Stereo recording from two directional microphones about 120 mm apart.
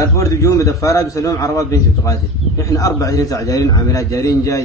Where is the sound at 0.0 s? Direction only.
25° left (ahead or behind).